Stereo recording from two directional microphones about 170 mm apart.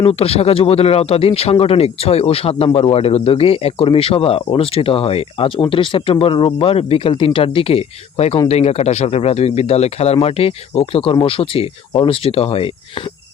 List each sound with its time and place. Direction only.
0.0 s speech: 35° left (ahead or behind)